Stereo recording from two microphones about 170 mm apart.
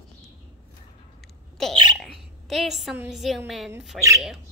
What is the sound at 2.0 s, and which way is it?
Hiccup, centre (ahead or behind).